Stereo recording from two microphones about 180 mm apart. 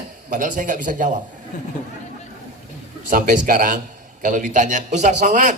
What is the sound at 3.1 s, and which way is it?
A man's voice, 50° right (ahead or behind).